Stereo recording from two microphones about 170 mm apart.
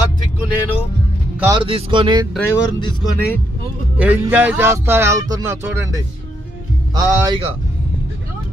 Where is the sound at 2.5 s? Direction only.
20° left (ahead or behind).